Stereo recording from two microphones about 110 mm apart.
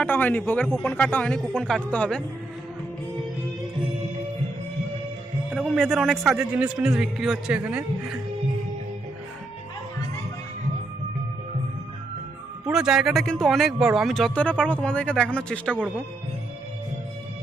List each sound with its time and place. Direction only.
0.0 s speech: 15° left (ahead or behind)
5.5 s a man's voice: centre (ahead or behind)
6.3 s a man's voice: 15° right (ahead or behind)
12.6 s speech: 5° right (ahead or behind); by 15.8 s 10° left (ahead or behind)